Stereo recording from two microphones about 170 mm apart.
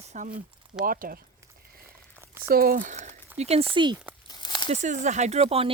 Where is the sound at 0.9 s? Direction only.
60° right (ahead or behind).